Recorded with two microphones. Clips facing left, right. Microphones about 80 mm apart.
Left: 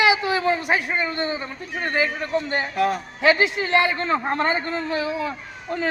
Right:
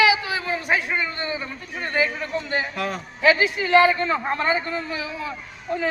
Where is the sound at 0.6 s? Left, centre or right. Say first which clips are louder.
Left 1 dB; centre.